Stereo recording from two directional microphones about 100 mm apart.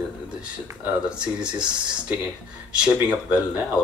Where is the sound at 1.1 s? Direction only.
10° right (ahead or behind).